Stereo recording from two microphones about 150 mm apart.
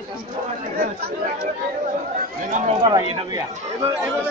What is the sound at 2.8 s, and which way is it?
Speech, 25° right (ahead or behind).